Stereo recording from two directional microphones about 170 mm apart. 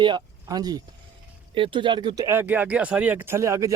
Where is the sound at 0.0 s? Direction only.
25° right (ahead or behind).